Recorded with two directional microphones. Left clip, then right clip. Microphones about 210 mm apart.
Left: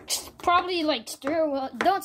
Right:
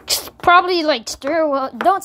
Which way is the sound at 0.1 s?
25° right (ahead or behind).